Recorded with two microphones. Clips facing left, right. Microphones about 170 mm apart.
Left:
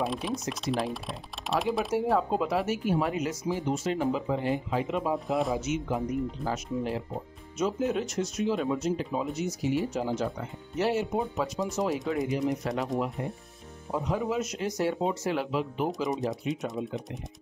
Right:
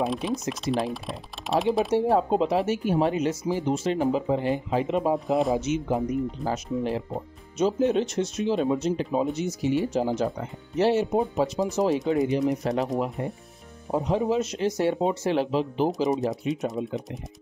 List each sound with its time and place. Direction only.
0.0 s speech: centre (ahead or behind)
2.1 s speech: 25° right (ahead or behind)
5.3 s speech: centre (ahead or behind)
5.6 s speech: 30° right (ahead or behind)
13.9 s speech: 30° right (ahead or behind)
16.1 s speech: centre (ahead or behind)